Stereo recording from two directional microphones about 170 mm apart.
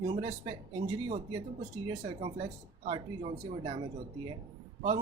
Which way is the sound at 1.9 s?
30° right (ahead or behind).